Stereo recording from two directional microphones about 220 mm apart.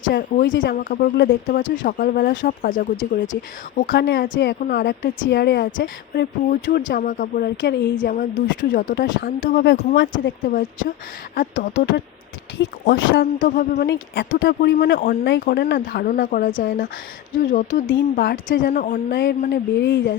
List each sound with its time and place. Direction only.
0.1 s speech: 40° left (ahead or behind)
2.5 s a woman's voice: 40° left (ahead or behind)
12.5 s speech: 40° left (ahead or behind)
13.0 s speech: 60° left (ahead or behind)
13.4 s a woman's voice: 45° left (ahead or behind)